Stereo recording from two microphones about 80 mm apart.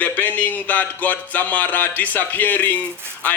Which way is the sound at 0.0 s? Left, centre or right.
Left.